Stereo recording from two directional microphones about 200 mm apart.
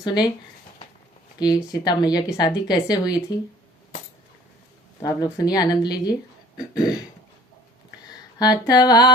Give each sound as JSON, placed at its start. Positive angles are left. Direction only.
{"t": 0.0, "sound": "a woman's voice", "side_deg": 20}
{"t": 1.4, "sound": "a woman's voice", "side_deg": 20}
{"t": 4.9, "sound": "a woman's voice", "side_deg": 20}
{"t": 6.6, "sound": "throat clearing", "side_deg": 20}
{"t": 8.4, "sound": "a woman's voice", "side_deg": 20}